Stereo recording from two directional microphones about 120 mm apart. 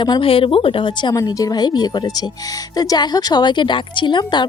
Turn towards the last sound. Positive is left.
turn(degrees=40)  # may be behind; listen again after turning